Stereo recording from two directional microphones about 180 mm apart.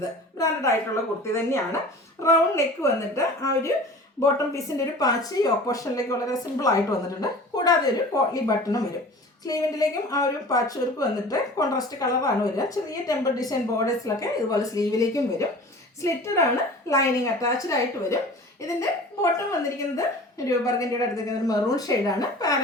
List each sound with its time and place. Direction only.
1.2 s speech: 15° left (ahead or behind)